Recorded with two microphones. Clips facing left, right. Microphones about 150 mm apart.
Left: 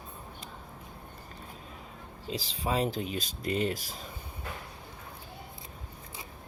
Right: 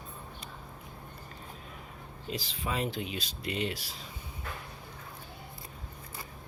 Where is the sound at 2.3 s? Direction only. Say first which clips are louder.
Left 4 dB; 30° left (ahead or behind).